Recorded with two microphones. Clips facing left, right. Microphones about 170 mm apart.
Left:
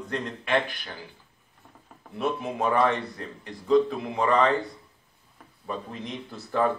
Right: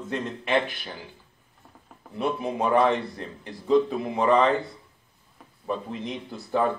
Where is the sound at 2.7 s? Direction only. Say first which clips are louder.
Right 3 dB; 20° right (ahead or behind).